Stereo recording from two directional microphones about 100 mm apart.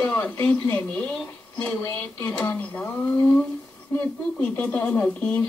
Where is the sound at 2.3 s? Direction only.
15° left (ahead or behind).